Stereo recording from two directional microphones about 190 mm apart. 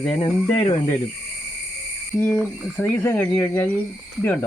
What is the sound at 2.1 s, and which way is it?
Cricket, 10° left (ahead or behind).